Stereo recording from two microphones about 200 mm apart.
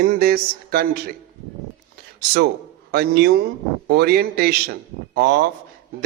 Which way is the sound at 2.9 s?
50° right (ahead or behind).